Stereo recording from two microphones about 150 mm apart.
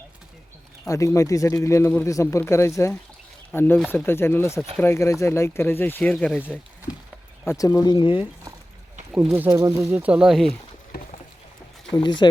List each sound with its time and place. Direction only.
0.9 s speech: 20° left (ahead or behind)
7.4 s speech: 20° left (ahead or behind)
9.1 s speech: 5° right (ahead or behind)
9.5 s speech: 20° right (ahead or behind); by 10.5 s centre (ahead or behind)
11.9 s speech: 30° left (ahead or behind)